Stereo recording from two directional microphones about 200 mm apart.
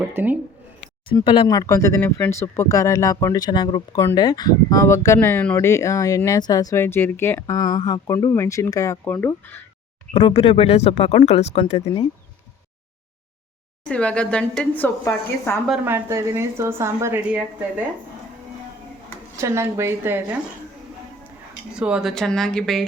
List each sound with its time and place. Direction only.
0.1 s a woman's voice: 10° right (ahead or behind)
1.1 s speech: 25° left (ahead or behind); by 9.6 s 10° left (ahead or behind)
10.1 s speech: 30° left (ahead or behind)
13.8 s speech: 5° left (ahead or behind)
15.7 s a woman's voice: 10° right (ahead or behind)
19.4 s a woman's voice: 15° right (ahead or behind)
21.8 s speech: 5° right (ahead or behind)